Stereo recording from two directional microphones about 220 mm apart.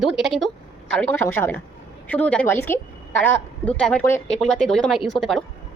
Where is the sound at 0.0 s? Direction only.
Centre (ahead or behind).